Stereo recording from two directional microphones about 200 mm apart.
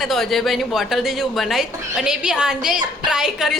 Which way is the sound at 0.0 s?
Centre (ahead or behind).